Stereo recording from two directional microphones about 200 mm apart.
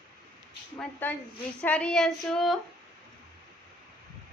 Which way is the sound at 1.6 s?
5° left (ahead or behind).